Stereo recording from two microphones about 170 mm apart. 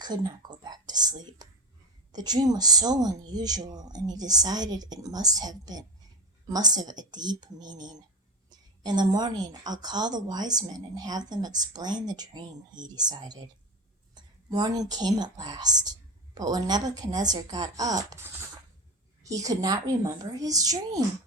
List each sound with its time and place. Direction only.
0.0 s speech: 25° right (ahead or behind)